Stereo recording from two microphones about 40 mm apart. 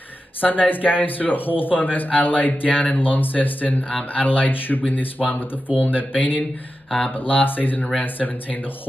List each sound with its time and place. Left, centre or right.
0.4 s speech: left